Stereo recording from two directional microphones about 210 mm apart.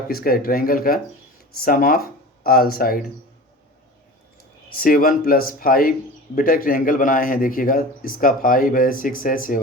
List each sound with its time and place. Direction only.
0.1 s speech: 45° left (ahead or behind)
4.8 s a man's voice: 45° left (ahead or behind)